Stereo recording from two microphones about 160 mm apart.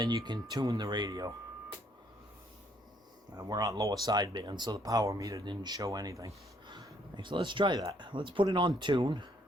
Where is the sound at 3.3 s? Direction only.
20° right (ahead or behind).